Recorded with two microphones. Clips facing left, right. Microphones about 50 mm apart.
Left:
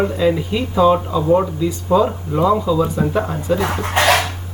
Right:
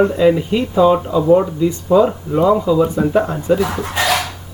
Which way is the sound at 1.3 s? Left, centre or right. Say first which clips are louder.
Right 2 dB; centre.